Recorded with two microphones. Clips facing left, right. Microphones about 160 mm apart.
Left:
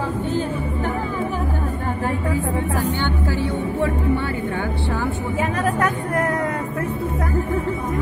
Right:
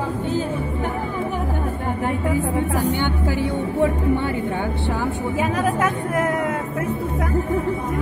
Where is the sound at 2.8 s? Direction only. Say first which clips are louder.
Right 1 dB; 15° right (ahead or behind).